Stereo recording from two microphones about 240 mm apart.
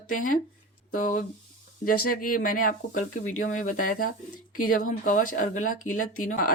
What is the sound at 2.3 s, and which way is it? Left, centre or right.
Speech, left.